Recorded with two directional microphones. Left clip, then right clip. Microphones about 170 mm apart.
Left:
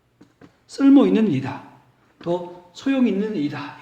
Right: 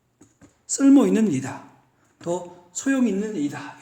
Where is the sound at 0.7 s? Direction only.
25° right (ahead or behind).